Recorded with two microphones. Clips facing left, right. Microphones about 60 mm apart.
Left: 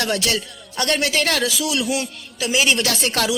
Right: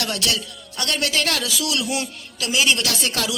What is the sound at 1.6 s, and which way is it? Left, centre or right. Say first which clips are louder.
Speech: left 2 dB; centre.